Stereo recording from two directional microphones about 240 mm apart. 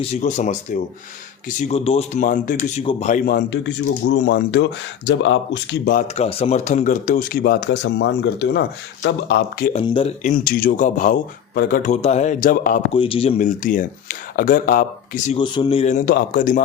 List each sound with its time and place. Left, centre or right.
0.0 s speech: left
6.1 s speech: left
9.7 s speech: left
10.2 s speech: left
12.9 s speech: left
15.4 s speech: centre; by 16.6 s left